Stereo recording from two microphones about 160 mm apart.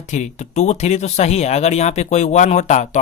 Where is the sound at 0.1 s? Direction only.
45° left (ahead or behind).